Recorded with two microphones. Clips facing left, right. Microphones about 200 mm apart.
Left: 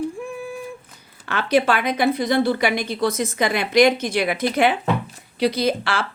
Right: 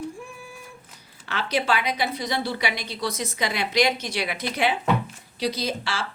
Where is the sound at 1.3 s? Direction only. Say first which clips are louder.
Left 6 dB; 55° left (ahead or behind).